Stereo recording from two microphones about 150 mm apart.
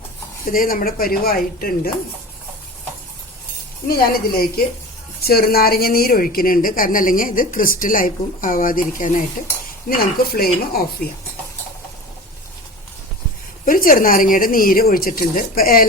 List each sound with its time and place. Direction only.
0.5 s a woman's voice: 70° left (ahead or behind)
3.8 s dishes: 85° left
5.2 s a woman's voice: 90° left; by 9.2 s 60° left (ahead or behind)
9.9 s dishes: 80° left
13.7 s a woman's voice: 70° left (ahead or behind)